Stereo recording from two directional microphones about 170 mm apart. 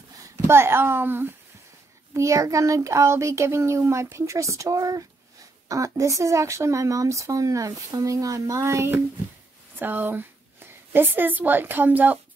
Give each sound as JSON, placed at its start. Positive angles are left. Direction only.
{"t": 0.2, "sound": "a child's voice", "side_deg": -15}